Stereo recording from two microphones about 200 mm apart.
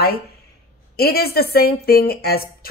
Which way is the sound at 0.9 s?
50° left (ahead or behind).